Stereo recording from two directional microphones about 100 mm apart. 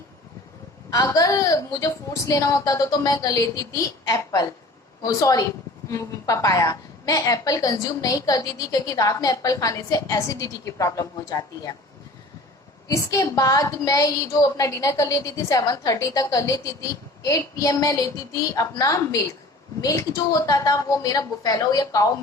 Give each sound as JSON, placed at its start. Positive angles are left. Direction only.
{"t": 0.9, "sound": "a woman's voice", "side_deg": 35}
{"t": 12.9, "sound": "a woman's voice", "side_deg": 35}